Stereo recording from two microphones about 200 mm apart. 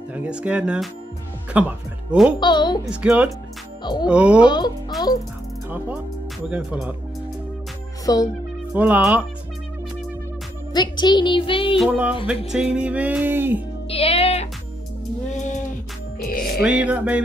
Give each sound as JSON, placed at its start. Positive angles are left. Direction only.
{"t": 0.1, "sound": "speech", "side_deg": -5}
{"t": 2.4, "sound": "speech", "side_deg": 20}
{"t": 2.8, "sound": "speech", "side_deg": -5}
{"t": 3.8, "sound": "speech", "side_deg": 20}
{"t": 4.1, "sound": "speech", "side_deg": -5}
{"t": 4.5, "sound": "speech", "side_deg": 20}
{"t": 6.5, "sound": "music", "side_deg": -5}
{"t": 8.0, "sound": "speech", "side_deg": 20}
{"t": 8.7, "sound": "music", "side_deg": -10}
{"t": 10.7, "sound": "speech", "side_deg": 20}
{"t": 11.7, "sound": "speech", "side_deg": -5}
{"t": 12.3, "sound": "music", "side_deg": -5}
{"t": 13.8, "sound": "music", "side_deg": 30}
{"t": 16.6, "sound": "music", "side_deg": -5}